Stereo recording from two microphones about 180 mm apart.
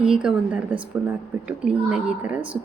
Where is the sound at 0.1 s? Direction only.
5° right (ahead or behind).